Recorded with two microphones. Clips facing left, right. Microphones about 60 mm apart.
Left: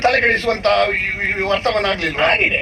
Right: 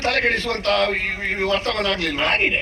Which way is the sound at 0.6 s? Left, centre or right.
Left.